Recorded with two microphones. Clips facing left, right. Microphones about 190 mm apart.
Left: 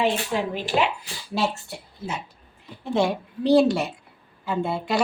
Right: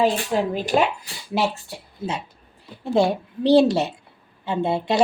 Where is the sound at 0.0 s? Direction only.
40° right (ahead or behind).